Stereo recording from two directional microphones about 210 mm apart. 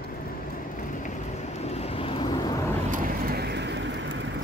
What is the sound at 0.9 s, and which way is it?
Vehicle, 35° left (ahead or behind).